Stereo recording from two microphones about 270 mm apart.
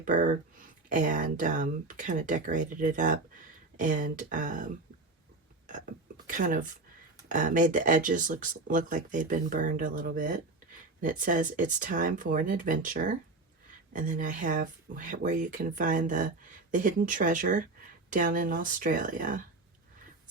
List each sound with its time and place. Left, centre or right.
0.0 s speech: right